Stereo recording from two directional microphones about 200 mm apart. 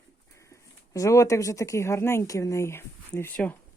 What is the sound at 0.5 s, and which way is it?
Speech, 15° left (ahead or behind).